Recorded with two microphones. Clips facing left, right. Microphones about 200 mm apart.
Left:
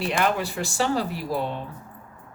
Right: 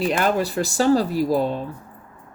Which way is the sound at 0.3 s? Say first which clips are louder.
Right 5 dB; 40° right (ahead or behind).